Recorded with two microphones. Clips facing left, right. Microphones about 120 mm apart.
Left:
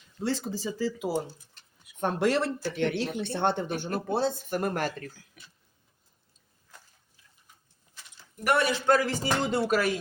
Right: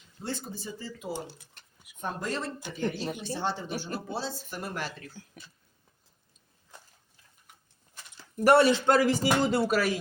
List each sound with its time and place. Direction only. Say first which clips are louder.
0.2 s speech: left 6 dB; 90° left
1.6 s a sound: right 3 dB; 55° right (ahead or behind)
2.0 s speech: left 8 dB; 80° left; by 5.1 s 50° left (ahead or behind)
8.4 s speech: right 6 dB; 30° right (ahead or behind)
8.9 s speech: right 1 dB; 20° right (ahead or behind)
9.2 s speech: right 2 dB; 5° right (ahead or behind)